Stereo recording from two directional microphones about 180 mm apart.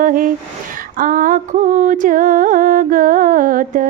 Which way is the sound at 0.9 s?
50° right (ahead or behind).